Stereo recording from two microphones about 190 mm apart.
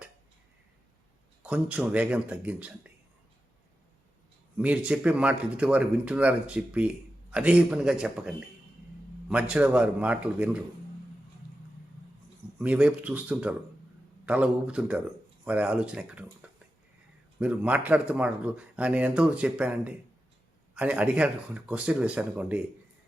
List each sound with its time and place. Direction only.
1.4 s speech: 5° right (ahead or behind)
4.5 s speech: 5° right (ahead or behind)
12.5 s speech: 5° right (ahead or behind)